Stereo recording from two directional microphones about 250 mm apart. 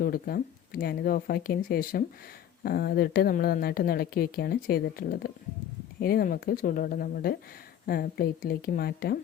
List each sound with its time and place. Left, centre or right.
0.0 s a woman's voice: left